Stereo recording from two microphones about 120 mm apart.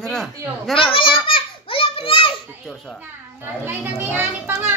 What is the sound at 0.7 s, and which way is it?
Children playing, 50° left (ahead or behind).